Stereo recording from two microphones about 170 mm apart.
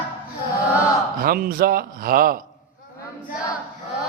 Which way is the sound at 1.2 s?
60° right (ahead or behind).